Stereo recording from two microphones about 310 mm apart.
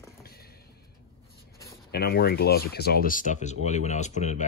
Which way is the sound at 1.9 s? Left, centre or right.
Left.